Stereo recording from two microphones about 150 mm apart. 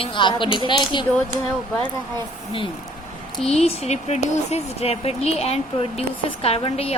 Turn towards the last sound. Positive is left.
turn(degrees=40)  # may be behind; listen again after turning